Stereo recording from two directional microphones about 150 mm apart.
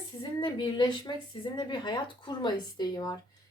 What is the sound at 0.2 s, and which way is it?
A woman's voice, 30° left (ahead or behind).